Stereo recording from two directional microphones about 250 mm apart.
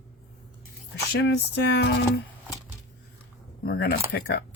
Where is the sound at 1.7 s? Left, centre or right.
Left.